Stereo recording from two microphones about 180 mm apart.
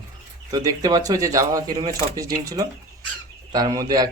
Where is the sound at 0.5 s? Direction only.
20° right (ahead or behind).